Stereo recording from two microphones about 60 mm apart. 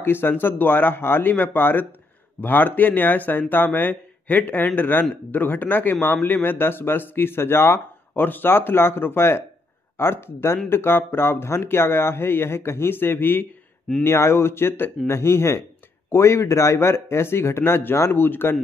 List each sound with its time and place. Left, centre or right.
0.0 s speech: left